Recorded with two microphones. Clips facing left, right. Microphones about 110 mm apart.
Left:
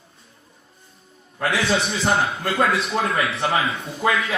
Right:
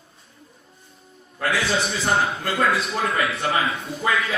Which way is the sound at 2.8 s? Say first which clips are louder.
Left 2 dB; 30° left (ahead or behind).